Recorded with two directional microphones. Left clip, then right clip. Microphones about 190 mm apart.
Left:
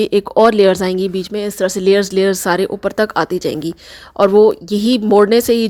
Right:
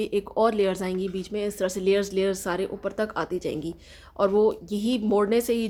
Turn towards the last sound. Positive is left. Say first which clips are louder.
# left 12 dB
turn(degrees=45)  # may be behind; listen again after turning